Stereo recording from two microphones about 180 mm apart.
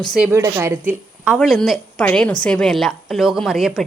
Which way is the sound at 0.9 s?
5° right (ahead or behind).